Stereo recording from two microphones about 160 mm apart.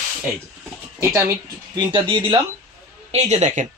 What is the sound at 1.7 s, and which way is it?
Speech, 30° right (ahead or behind).